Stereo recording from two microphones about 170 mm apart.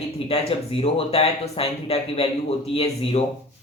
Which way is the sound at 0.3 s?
35° left (ahead or behind).